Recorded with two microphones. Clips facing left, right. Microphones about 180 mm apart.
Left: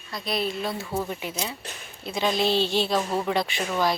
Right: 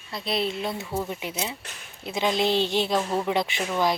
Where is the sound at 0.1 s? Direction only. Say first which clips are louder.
Right 1 dB; 25° right (ahead or behind).